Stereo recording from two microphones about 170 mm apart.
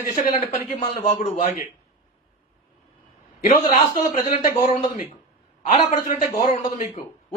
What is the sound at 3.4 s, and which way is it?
A man's voice, 50° left (ahead or behind).